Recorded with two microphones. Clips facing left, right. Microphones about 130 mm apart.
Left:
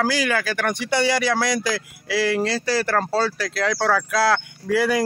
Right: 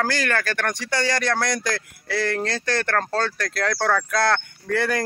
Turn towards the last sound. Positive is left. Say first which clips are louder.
# left 3 dB
turn(degrees=5)  # may be behind; listen again after turning